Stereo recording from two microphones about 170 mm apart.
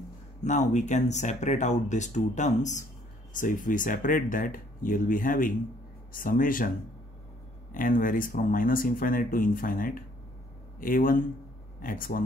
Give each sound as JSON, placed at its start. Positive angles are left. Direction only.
{"t": 0.4, "sound": "speech", "side_deg": 45}
{"t": 7.7, "sound": "speech", "side_deg": 55}